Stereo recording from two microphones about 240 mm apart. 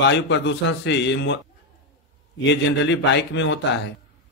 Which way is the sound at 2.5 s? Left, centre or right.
Left.